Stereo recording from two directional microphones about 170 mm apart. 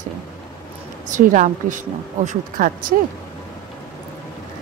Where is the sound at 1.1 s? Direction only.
50° right (ahead or behind).